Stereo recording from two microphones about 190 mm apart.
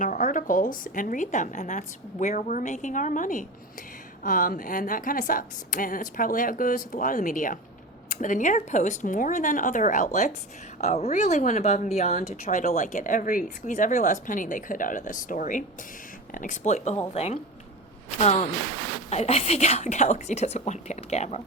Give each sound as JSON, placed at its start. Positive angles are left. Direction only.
{"t": 0.0, "sound": "a woman's voice", "side_deg": 40}